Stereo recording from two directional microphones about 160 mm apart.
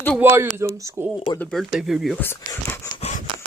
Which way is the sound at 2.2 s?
15° left (ahead or behind).